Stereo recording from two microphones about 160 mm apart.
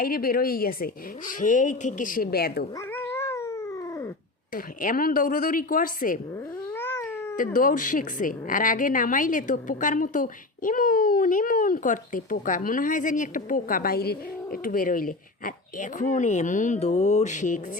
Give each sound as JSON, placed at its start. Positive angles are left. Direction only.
{"t": 0.0, "sound": "a woman's voice", "side_deg": 65}
{"t": 2.7, "sound": "cat", "side_deg": 15}
{"t": 4.5, "sound": "a woman's voice", "side_deg": 60}
{"t": 6.3, "sound": "cat", "side_deg": 15}
{"t": 7.3, "sound": "a woman's voice", "side_deg": 60}